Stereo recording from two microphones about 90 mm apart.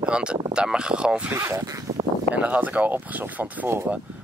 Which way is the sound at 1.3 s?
30° right (ahead or behind).